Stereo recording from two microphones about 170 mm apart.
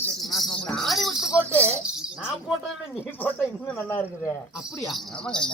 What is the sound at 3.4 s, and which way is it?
Speech, centre (ahead or behind).